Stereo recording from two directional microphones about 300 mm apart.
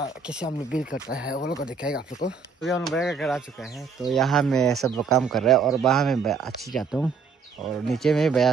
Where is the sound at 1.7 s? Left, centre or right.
Centre.